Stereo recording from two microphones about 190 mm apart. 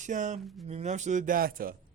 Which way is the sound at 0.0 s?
40° right (ahead or behind).